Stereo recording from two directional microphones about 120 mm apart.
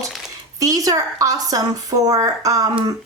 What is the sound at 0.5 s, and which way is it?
Speech, 30° right (ahead or behind).